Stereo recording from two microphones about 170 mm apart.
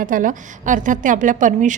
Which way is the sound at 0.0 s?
50° right (ahead or behind).